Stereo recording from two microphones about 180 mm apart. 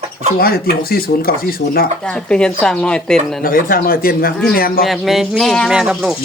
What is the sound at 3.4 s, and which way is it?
Speech, 55° left (ahead or behind).